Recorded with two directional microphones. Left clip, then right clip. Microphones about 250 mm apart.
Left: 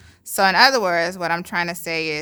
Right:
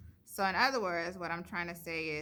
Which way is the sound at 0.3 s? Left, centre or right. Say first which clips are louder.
Left 16 dB; left.